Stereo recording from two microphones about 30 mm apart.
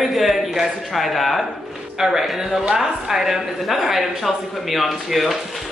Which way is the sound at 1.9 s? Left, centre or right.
Centre.